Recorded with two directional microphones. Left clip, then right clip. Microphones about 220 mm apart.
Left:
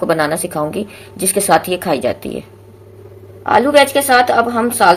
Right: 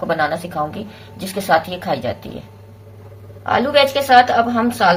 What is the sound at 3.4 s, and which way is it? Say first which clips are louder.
A woman's voice: left 4 dB; 35° left (ahead or behind).